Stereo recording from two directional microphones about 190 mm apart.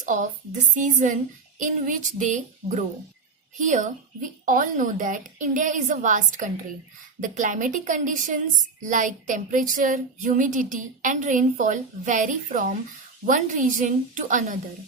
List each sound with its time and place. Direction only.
0.0 s a child's voice: 45° right (ahead or behind)